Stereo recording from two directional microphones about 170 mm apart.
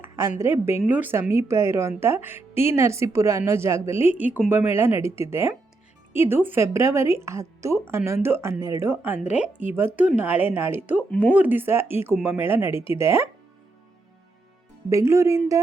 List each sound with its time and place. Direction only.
0.0 s speech: 15° right (ahead or behind)
11.1 s speech: 10° left (ahead or behind)
11.3 s speech: 10° right (ahead or behind)
14.8 s speech: 15° right (ahead or behind)